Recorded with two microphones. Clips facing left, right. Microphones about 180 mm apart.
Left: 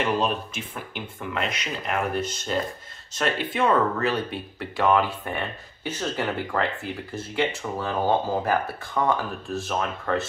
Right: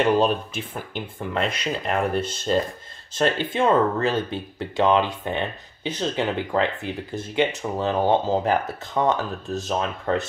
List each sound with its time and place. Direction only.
1.3 s speech: 30° right (ahead or behind)